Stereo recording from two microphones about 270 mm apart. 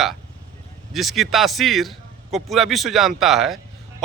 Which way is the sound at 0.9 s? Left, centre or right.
Centre.